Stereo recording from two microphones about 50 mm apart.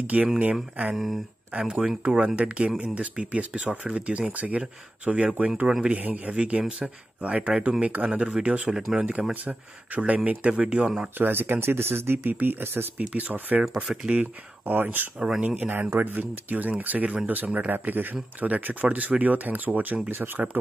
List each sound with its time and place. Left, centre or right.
0.0 s speech: right
0.9 s speech: centre
1.6 s speech: centre
5.9 s speech: right
6.3 s speech: right
9.3 s speech: right
11.1 s speech: right
12.9 s speech: right
13.9 s speech: centre
14.6 s speech: right
15.1 s speech: centre
15.4 s speech: right
15.9 s speech: right